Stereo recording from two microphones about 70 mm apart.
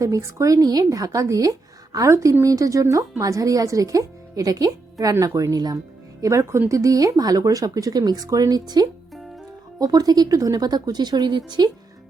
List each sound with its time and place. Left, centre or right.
0.0 s speech: right
2.0 s a woman's voice: right
2.4 s speech: right
6.2 s speech: right
9.7 s speech: right